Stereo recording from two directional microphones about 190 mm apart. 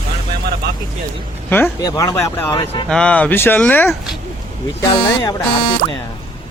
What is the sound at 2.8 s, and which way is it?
Speech, 5° left (ahead or behind).